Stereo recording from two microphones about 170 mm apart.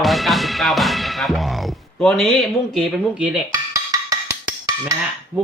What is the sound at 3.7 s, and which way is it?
Music, 20° right (ahead or behind).